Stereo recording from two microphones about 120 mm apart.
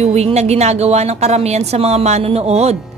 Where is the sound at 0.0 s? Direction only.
60° right (ahead or behind).